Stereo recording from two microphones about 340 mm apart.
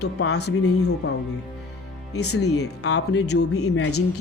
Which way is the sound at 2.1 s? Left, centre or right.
Left.